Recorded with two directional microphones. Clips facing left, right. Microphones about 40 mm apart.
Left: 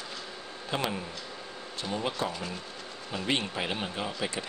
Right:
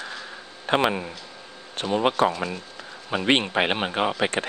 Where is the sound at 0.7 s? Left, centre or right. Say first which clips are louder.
Right 11 dB; right.